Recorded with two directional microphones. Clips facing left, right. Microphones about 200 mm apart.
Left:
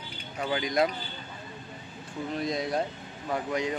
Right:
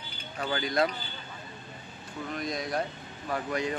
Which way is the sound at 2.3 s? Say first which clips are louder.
Left 3 dB; 25° left (ahead or behind).